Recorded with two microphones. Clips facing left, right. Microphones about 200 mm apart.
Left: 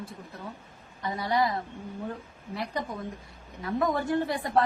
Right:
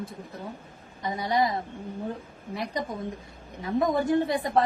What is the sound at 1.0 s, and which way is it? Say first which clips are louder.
Speech: right 1 dB; 20° right (ahead or behind).